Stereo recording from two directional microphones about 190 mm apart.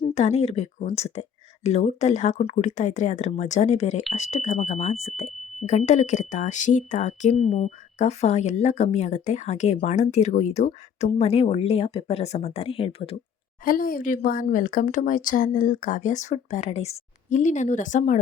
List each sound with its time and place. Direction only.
0.1 s speech: 35° left (ahead or behind)
13.7 s speech: 50° left (ahead or behind)